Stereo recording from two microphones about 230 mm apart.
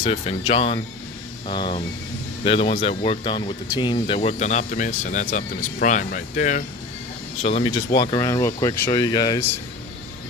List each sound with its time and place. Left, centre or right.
0.0 s speech: left
7.4 s speech: left